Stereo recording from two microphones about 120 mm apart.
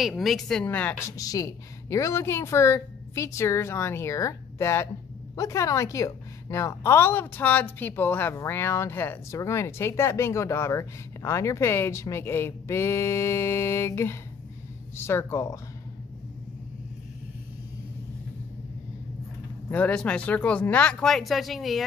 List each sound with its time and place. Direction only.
0.0 s a woman's voice: centre (ahead or behind)
0.7 s speech: 15° left (ahead or behind)
1.0 s a woman's voice: 30° left (ahead or behind)
19.7 s speech: 10° left (ahead or behind)